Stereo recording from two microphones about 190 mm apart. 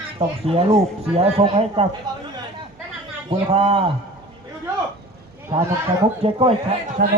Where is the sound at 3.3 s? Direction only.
30° right (ahead or behind).